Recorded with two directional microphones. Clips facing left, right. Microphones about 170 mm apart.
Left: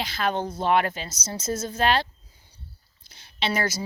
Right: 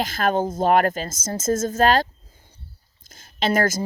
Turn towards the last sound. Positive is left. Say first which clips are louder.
# right 6 dB
turn(degrees=-50)  # may be behind; listen again after turning